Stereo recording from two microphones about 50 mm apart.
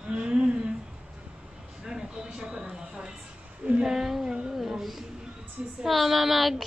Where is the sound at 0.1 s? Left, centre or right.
Centre.